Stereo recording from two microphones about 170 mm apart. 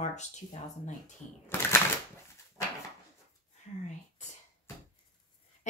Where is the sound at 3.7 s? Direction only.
45° left (ahead or behind).